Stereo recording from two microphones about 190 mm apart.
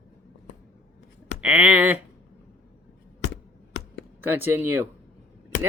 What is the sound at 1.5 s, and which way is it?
Speech, 5° right (ahead or behind).